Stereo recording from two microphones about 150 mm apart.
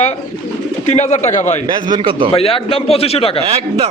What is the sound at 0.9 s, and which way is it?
Speech, 50° left (ahead or behind).